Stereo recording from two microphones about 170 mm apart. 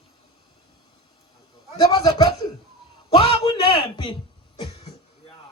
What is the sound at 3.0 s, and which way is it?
A man's voice, 35° left (ahead or behind).